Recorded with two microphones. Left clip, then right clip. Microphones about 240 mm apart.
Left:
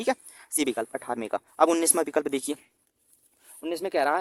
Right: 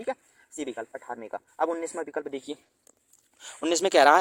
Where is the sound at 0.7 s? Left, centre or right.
Left.